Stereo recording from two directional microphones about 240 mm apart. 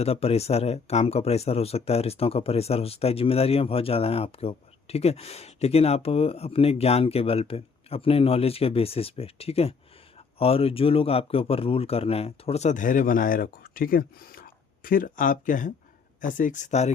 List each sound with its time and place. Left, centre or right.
0.0 s speech: left